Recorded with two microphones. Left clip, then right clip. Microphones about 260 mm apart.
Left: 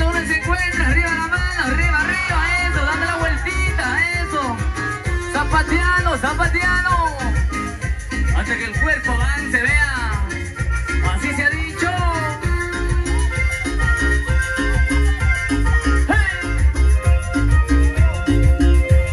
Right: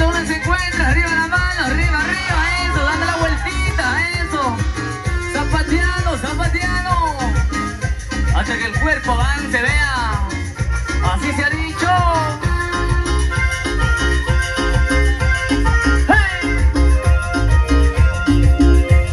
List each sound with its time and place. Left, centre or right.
0.0 s music: centre
5.3 s music: centre
8.5 s music: centre
11.3 s music: centre
14.6 s music: right
18.2 s music: right